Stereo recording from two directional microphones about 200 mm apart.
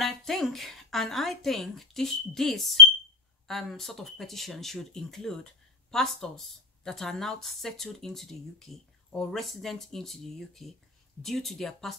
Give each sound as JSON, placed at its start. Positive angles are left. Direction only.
{"t": 0.0, "sound": "speech", "side_deg": 0}